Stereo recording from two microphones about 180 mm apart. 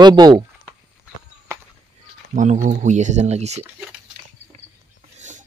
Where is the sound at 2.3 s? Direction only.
45° right (ahead or behind).